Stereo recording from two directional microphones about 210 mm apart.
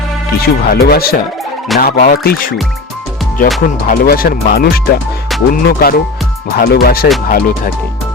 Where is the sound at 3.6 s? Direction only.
45° left (ahead or behind).